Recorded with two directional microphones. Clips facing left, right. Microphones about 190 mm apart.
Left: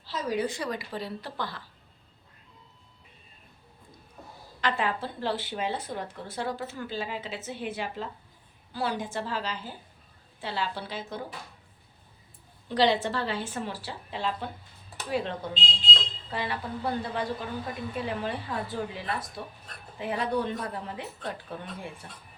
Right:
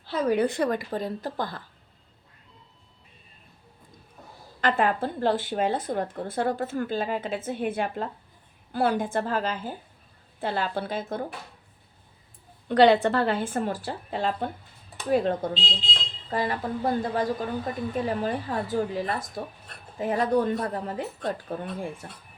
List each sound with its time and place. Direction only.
0.0 s a woman's voice: 60° right (ahead or behind)
4.6 s a woman's voice: 50° right (ahead or behind)
12.6 s a woman's voice: 60° right (ahead or behind); by 21.8 s 45° right (ahead or behind)